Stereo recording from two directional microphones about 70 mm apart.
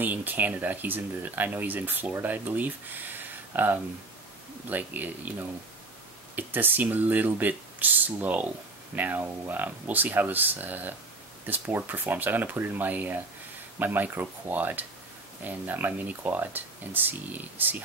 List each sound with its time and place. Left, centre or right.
0.0 s speech: right